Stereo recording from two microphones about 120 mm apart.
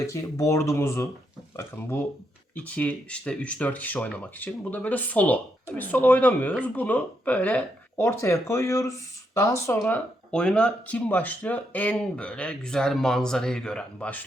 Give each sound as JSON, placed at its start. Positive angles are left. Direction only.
{"t": 0.1, "sound": "speech", "side_deg": 25}
{"t": 10.3, "sound": "speech", "side_deg": 10}